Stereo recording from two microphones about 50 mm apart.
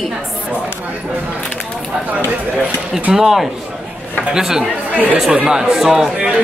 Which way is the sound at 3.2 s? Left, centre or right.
Centre.